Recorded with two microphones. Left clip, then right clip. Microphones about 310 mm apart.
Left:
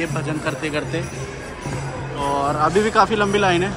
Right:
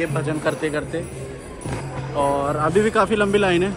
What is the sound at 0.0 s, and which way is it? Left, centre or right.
Speech, centre.